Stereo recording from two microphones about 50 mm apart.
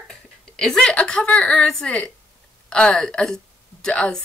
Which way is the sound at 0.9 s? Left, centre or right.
Centre.